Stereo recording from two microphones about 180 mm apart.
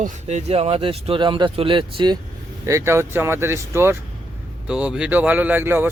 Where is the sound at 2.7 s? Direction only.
15° right (ahead or behind).